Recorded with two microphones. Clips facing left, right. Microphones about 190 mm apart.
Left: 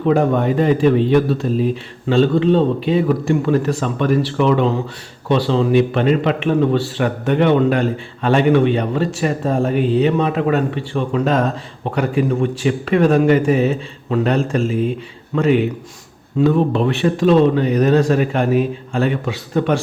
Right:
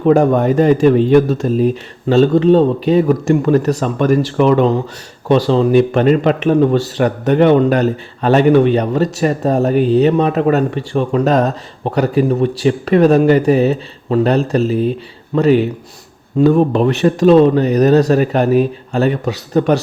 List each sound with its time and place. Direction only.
0.0 s speech: 45° right (ahead or behind)